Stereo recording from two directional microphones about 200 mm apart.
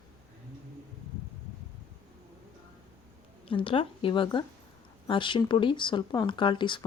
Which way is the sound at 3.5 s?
25° left (ahead or behind).